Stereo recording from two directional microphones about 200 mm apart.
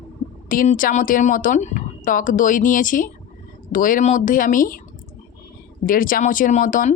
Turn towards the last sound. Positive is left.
turn(degrees=40)  # may be behind; listen again after turning